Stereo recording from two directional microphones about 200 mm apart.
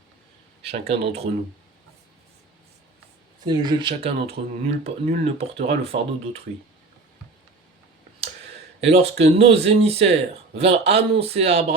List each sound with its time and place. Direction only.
0.7 s speech: 30° right (ahead or behind)
3.4 s speech: 20° right (ahead or behind)
8.9 s speech: 30° right (ahead or behind)